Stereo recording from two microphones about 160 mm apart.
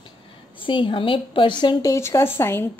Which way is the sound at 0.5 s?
30° left (ahead or behind).